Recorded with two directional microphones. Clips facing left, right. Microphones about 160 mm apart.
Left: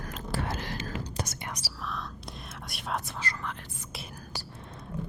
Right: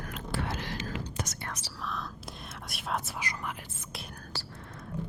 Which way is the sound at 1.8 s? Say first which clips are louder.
Even; centre (ahead or behind).